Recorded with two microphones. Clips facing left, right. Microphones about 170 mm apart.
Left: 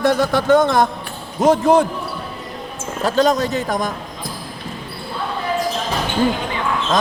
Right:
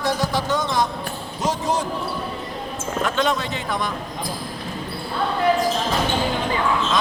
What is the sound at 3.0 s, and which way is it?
Speech, 40° left (ahead or behind).